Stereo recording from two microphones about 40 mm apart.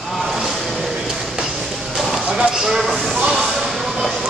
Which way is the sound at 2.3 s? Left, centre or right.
Centre.